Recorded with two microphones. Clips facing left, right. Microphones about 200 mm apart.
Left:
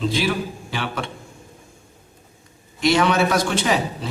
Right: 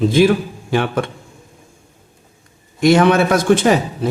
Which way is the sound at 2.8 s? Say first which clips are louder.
Right 6 dB; 50° right (ahead or behind).